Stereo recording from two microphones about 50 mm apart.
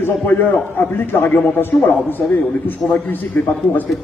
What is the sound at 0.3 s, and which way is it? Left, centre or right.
A man's voice, left.